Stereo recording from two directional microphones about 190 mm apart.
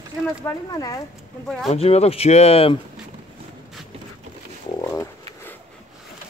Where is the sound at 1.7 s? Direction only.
35° left (ahead or behind).